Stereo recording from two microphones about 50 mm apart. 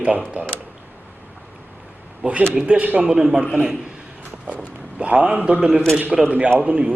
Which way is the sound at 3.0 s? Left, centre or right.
Centre.